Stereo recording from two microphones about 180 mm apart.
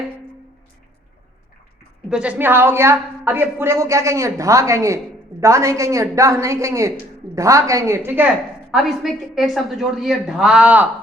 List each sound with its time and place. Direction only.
2.0 s a woman's voice: 5° right (ahead or behind)